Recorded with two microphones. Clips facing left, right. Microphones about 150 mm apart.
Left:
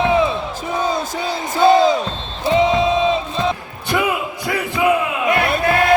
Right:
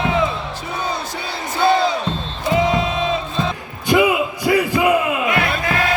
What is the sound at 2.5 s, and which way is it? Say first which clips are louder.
Crowd: left 2 dB; 25° left (ahead or behind).